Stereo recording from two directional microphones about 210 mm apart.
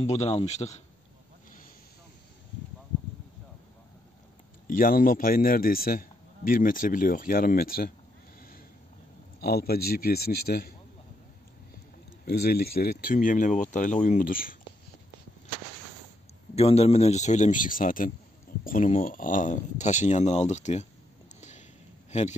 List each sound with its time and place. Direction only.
0.0 s speech: 30° left (ahead or behind)
4.6 s speech: 40° left (ahead or behind)
9.4 s speech: 45° left (ahead or behind)
12.3 s speech: 50° left (ahead or behind)
16.5 s speech: 30° left (ahead or behind)
21.4 s a sound: 35° left (ahead or behind)